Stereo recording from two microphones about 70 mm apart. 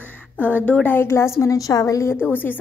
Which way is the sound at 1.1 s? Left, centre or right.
Left.